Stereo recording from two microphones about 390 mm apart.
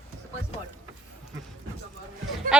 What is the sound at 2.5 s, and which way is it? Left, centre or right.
Speech, centre.